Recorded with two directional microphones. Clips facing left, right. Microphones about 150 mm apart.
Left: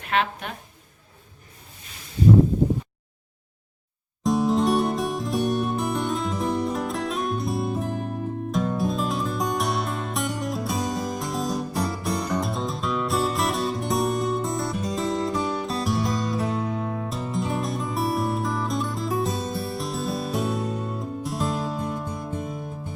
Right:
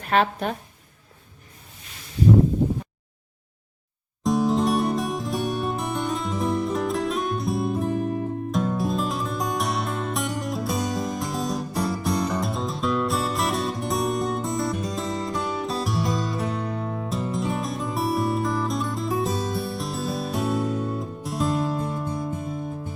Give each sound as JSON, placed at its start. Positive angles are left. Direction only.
{"t": 0.0, "sound": "a woman's voice", "side_deg": -40}
{"t": 4.2, "sound": "music", "side_deg": 0}